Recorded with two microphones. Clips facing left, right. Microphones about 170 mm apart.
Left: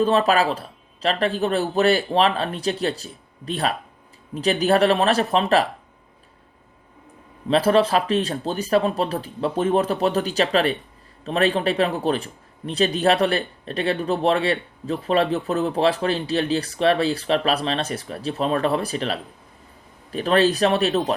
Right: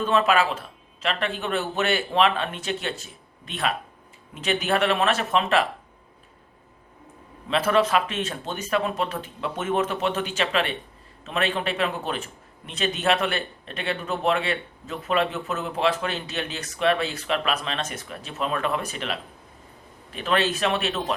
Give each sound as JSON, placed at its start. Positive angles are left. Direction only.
{"t": 0.0, "sound": "a man's voice", "side_deg": 35}
{"t": 7.4, "sound": "a man's voice", "side_deg": 35}